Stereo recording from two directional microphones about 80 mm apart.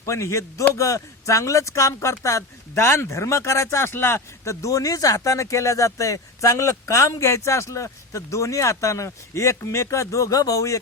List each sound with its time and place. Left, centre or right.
0.0 s speech: left